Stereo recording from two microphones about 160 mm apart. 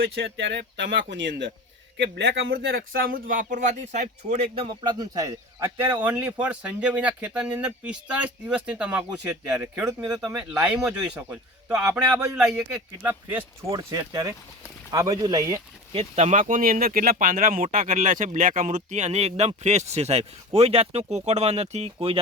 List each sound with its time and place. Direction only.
0.0 s speech: 90° right; by 9.8 s 10° right (ahead or behind)
10.8 s speech: 5° right (ahead or behind)
13.7 s speech: 25° right (ahead or behind)
15.9 s speech: 40° right (ahead or behind)